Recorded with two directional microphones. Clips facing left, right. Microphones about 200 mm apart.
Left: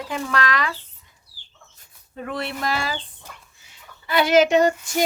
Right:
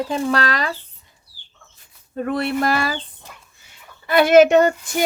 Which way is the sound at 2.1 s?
50° right (ahead or behind).